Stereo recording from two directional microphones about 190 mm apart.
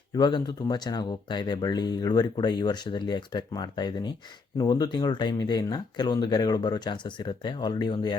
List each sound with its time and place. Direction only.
0.1 s speech: 25° left (ahead or behind)